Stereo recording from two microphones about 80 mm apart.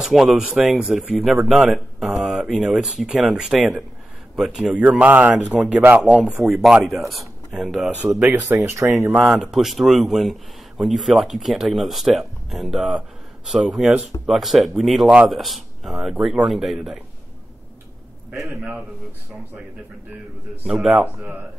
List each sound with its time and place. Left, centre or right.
0.0 s speech: centre
4.8 s speech: centre
6.8 s speech: centre
8.2 s speech: right
9.3 s speech: centre
18.5 s speech: right
20.6 s speech: centre